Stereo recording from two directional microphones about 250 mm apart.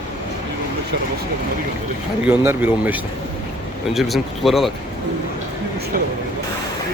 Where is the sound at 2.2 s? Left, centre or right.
Centre.